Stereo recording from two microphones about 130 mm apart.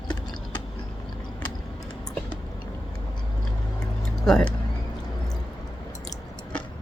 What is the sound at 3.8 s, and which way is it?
Vehicle, 5° left (ahead or behind).